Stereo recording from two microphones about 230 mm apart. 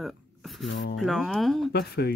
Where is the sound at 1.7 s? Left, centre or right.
Left.